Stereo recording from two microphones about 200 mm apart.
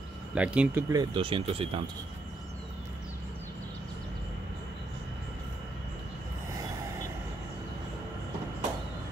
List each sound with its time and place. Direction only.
0.3 s speech: 5° right (ahead or behind); by 1.9 s 30° right (ahead or behind)